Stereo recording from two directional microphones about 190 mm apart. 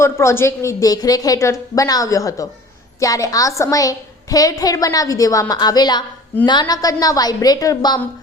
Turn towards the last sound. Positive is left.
turn(degrees=20)  # may be behind; listen again after turning